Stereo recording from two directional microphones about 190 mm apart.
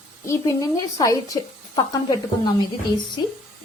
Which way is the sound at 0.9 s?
20° left (ahead or behind).